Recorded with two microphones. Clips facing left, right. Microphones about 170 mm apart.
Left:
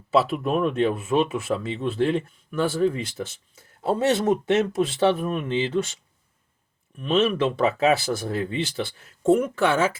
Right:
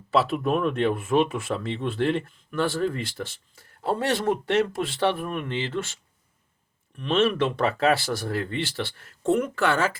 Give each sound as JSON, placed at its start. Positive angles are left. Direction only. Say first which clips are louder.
{"t": 0.1, "sound": "speech", "louder": "left 1 dB", "side_deg": 5}
{"t": 3.2, "sound": "speech", "louder": "left 2 dB", "side_deg": 20}
{"t": 7.0, "sound": "speech", "louder": "left 1 dB", "side_deg": 5}